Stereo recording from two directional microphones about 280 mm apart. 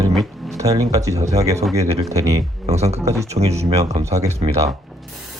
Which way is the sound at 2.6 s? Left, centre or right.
Right.